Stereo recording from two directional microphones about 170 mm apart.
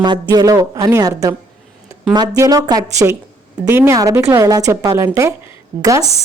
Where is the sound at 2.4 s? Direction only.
20° right (ahead or behind).